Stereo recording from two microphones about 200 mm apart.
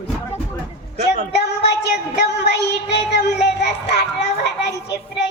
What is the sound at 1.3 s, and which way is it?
A woman's voice, 60° left (ahead or behind).